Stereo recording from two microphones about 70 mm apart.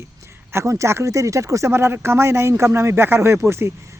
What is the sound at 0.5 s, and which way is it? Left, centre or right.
Speech, right.